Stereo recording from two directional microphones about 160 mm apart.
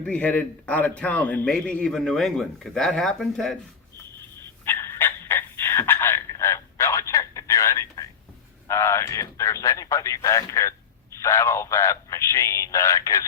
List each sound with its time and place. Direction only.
0.0 s a man's voice: 10° left (ahead or behind)
4.6 s a sound: 15° left (ahead or behind)
8.6 s speech: 15° left (ahead or behind)